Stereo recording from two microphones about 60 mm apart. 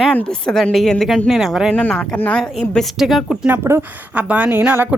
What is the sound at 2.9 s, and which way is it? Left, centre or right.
Speech, centre.